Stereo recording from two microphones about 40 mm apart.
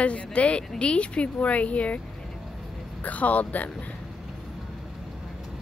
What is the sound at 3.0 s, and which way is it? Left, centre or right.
Speech, left.